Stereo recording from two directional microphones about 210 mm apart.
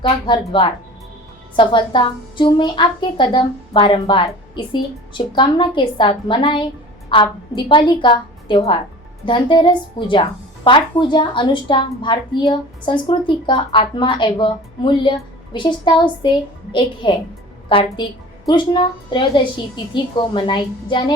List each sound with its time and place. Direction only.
0.0 s a woman's voice: 25° left (ahead or behind)